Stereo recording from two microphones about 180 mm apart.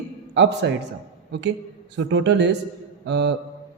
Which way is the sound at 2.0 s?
85° right.